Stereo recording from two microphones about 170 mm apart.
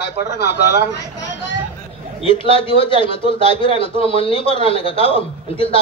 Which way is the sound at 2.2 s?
30° left (ahead or behind).